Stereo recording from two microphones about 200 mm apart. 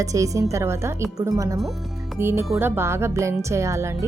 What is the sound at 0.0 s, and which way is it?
Speech, 15° right (ahead or behind).